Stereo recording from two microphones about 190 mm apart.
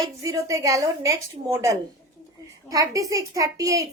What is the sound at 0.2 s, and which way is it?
A woman's voice, 15° right (ahead or behind).